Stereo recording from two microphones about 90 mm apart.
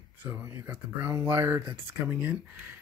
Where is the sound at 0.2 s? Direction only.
25° right (ahead or behind).